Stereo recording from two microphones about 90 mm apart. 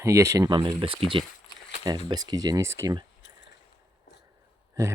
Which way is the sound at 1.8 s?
50° right (ahead or behind).